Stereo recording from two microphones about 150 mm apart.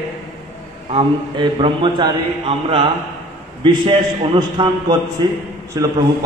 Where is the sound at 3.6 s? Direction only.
35° right (ahead or behind).